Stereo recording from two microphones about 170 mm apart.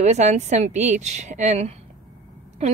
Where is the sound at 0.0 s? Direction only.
40° right (ahead or behind).